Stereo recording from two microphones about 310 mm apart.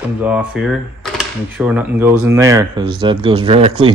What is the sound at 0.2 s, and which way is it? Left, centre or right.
Speech, centre.